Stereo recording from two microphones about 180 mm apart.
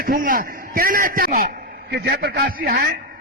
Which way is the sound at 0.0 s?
50° right (ahead or behind).